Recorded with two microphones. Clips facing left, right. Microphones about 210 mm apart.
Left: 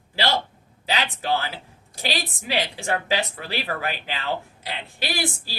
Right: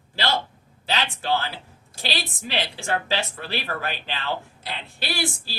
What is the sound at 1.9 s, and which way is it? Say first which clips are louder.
A woman's voice: left 2 dB; 15° left (ahead or behind).